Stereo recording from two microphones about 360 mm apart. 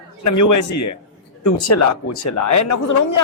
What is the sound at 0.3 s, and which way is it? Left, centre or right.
Speech, left.